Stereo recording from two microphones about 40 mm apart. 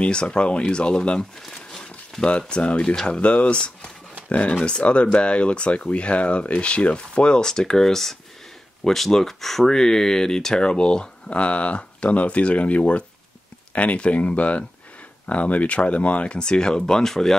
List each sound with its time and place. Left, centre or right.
0.0 s speech: left
2.2 s speech: left
16.3 s speech: left